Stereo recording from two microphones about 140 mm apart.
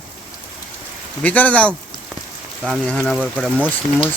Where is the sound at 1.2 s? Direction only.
10° left (ahead or behind).